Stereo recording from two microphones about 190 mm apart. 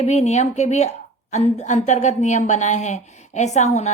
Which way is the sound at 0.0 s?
35° left (ahead or behind).